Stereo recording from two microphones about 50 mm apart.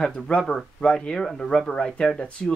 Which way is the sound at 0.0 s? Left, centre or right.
Left.